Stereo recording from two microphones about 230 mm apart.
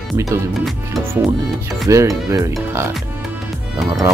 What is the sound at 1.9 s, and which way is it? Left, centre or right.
Speech, centre.